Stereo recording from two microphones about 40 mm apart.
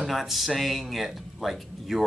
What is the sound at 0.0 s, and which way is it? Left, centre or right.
Speech, centre.